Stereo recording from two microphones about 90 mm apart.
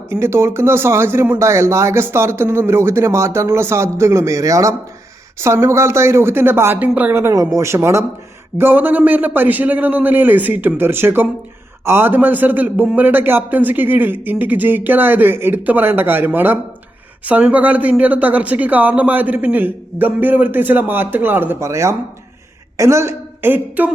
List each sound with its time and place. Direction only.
0.1 s speech: 30° right (ahead or behind)
7.2 s speech: 35° right (ahead or behind)